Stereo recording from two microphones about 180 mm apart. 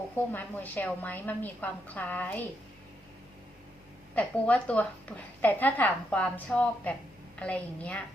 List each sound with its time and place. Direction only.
0.3 s a woman's voice: 10° left (ahead or behind)
4.1 s a woman's voice: 10° left (ahead or behind)